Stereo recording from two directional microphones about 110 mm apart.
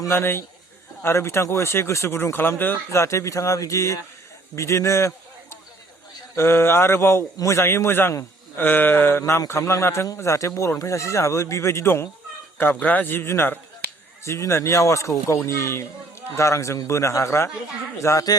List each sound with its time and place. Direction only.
0.0 s a man's voice: 20° left (ahead or behind)